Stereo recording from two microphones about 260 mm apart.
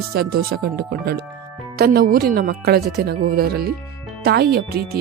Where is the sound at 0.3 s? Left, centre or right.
Right.